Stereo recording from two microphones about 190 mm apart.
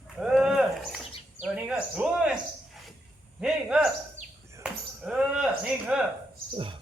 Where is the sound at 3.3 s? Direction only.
5° right (ahead or behind).